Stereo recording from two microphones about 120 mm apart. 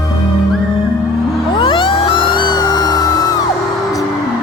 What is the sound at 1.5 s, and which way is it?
Music, 45° left (ahead or behind).